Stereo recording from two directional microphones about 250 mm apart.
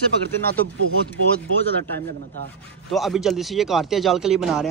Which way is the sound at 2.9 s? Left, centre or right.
Centre.